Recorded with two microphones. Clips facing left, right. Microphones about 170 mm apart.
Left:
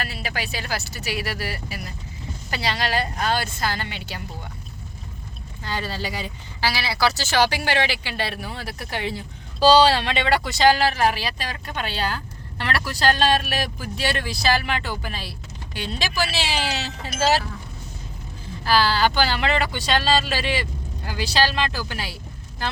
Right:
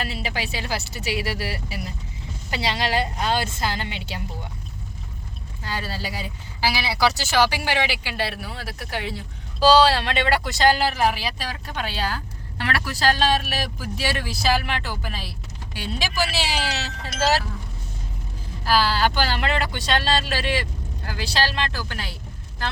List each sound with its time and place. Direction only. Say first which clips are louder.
0.0 s speech: right 1 dB; 25° right (ahead or behind)
5.6 s speech: left 2 dB; 5° right (ahead or behind)
18.6 s speech: left 1 dB; 5° right (ahead or behind)